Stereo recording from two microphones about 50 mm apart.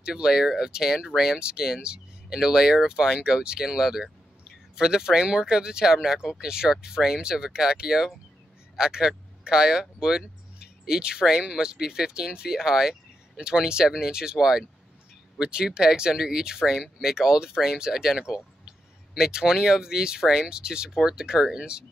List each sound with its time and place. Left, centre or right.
0.0 s speech: centre